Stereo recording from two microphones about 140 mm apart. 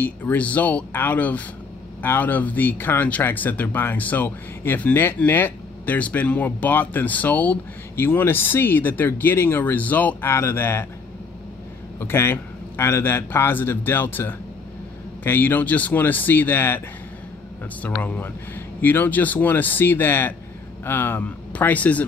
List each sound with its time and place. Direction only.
0.0 s speech: 10° left (ahead or behind)
12.0 s speech: 15° left (ahead or behind)
17.8 s speech: 10° left (ahead or behind)